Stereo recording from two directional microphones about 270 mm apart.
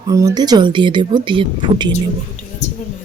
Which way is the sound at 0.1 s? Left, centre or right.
Centre.